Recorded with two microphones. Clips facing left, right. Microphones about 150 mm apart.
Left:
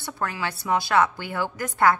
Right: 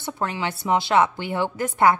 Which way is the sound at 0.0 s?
20° right (ahead or behind).